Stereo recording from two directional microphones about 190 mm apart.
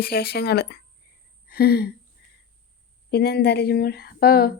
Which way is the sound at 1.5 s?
55° left (ahead or behind).